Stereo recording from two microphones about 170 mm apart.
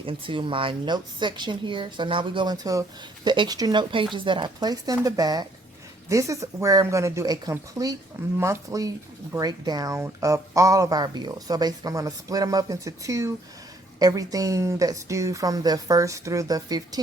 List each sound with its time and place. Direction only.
0.0 s speech: 30° right (ahead or behind)